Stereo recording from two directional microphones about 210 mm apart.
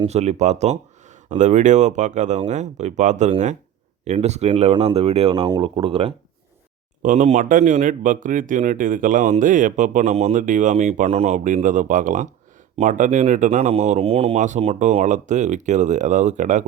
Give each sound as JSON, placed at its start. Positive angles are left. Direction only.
{"t": 0.0, "sound": "speech", "side_deg": -30}
{"t": 7.0, "sound": "speech", "side_deg": -35}